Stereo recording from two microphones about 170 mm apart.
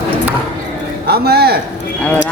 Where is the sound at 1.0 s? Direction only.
70° right (ahead or behind).